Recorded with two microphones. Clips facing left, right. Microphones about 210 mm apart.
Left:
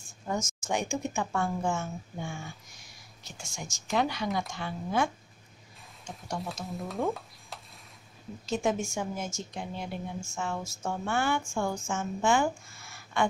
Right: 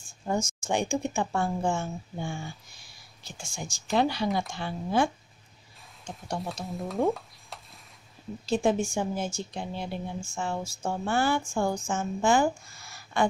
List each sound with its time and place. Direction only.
0.3 s speech: 30° right (ahead or behind)
6.4 s speech: centre (ahead or behind)
7.2 s stir: centre (ahead or behind)
8.5 s a woman's voice: 30° right (ahead or behind)